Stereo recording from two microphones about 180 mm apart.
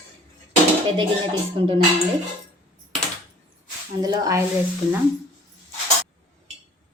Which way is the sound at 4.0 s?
20° right (ahead or behind).